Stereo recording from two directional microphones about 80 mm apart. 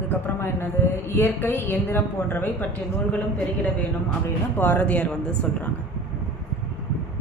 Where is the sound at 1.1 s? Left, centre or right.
Left.